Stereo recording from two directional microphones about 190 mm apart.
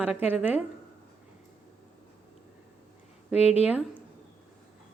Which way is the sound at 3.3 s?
35° left (ahead or behind).